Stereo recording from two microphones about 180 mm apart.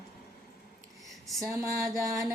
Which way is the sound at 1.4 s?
15° right (ahead or behind).